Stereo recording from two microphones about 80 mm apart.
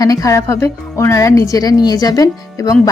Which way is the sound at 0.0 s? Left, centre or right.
Left.